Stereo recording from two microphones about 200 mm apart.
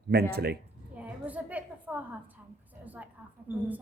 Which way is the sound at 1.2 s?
5° right (ahead or behind).